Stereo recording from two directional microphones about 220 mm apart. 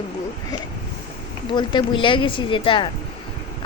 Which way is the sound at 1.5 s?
20° left (ahead or behind).